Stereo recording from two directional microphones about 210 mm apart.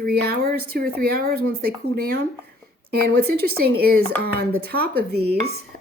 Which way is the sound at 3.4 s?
45° right (ahead or behind).